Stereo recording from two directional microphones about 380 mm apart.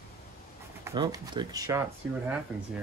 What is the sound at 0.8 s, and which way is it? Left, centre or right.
Speech, centre.